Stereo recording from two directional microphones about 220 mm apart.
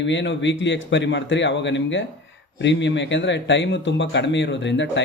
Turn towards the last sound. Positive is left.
turn(degrees=55)  # may be behind; listen again after turning